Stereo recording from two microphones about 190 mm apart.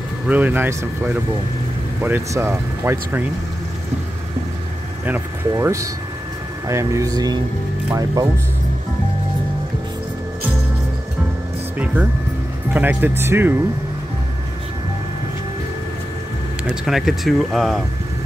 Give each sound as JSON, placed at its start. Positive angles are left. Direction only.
{"t": 0.3, "sound": "speech", "side_deg": -10}
{"t": 5.0, "sound": "speech", "side_deg": -10}
{"t": 11.8, "sound": "speech", "side_deg": -10}
{"t": 16.6, "sound": "speech", "side_deg": 0}